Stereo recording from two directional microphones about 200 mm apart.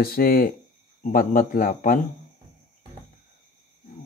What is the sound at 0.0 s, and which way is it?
Speech, 45° left (ahead or behind).